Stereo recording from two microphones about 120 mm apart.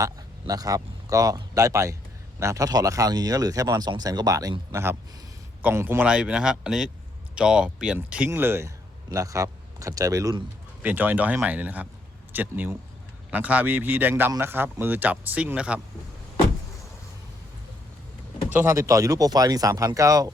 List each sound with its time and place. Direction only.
0.0 s a man's voice: 30° right (ahead or behind)
10.8 s a man's voice: 15° right (ahead or behind)
18.5 s speech: 25° right (ahead or behind)